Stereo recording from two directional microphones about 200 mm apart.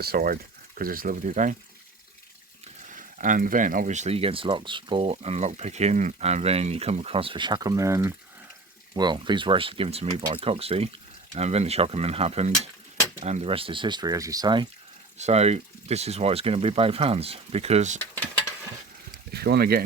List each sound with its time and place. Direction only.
0.0 s speech: 50° right (ahead or behind)
2.9 s speech: 40° right (ahead or behind); by 14.7 s 20° right (ahead or behind)
15.2 s speech: 30° right (ahead or behind)
19.3 s speech: 50° right (ahead or behind)